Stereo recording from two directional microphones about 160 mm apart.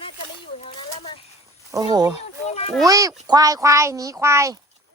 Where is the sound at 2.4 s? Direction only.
40° left (ahead or behind).